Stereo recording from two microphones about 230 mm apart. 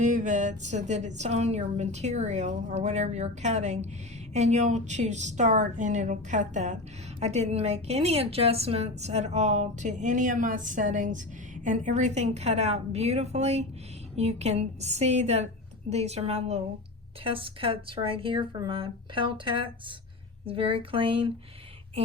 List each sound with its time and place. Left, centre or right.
0.0 s a woman's voice: right